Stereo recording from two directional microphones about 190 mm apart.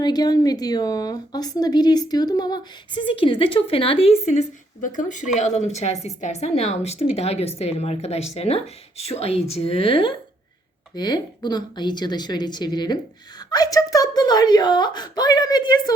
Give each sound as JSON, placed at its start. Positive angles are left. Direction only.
{"t": 0.0, "sound": "a woman's voice", "side_deg": 20}